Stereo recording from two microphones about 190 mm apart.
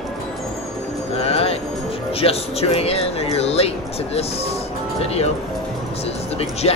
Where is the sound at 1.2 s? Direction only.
30° left (ahead or behind).